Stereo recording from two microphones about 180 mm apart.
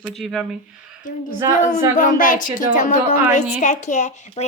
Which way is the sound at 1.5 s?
45° left (ahead or behind).